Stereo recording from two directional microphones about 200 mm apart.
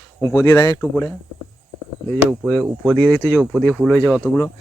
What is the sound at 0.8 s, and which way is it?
Speech, centre (ahead or behind).